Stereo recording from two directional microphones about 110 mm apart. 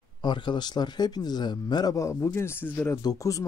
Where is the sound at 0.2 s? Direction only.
45° left (ahead or behind); by 2.9 s 20° left (ahead or behind).